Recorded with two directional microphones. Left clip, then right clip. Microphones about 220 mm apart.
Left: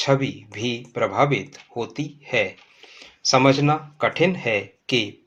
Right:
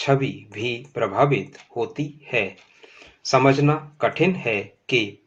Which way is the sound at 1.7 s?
20° left (ahead or behind).